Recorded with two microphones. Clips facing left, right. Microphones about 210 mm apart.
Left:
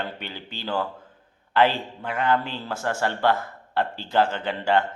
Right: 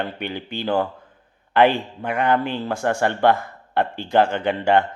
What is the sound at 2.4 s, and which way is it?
Speech, 55° right (ahead or behind).